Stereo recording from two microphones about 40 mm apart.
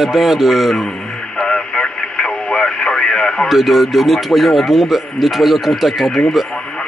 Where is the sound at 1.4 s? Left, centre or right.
Centre.